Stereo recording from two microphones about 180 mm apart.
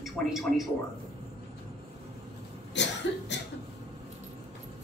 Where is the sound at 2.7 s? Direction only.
75° left (ahead or behind).